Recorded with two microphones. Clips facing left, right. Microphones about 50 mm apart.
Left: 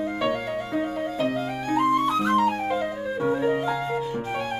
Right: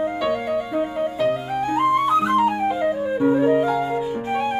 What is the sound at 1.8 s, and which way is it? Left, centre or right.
Flute, centre.